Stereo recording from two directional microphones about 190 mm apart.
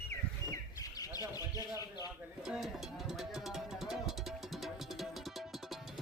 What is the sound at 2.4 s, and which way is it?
Music, centre (ahead or behind).